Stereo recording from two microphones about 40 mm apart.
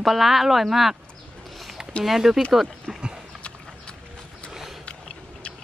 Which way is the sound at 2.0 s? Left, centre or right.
Centre.